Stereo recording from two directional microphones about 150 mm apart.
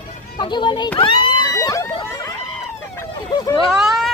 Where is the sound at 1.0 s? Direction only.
35° left (ahead or behind).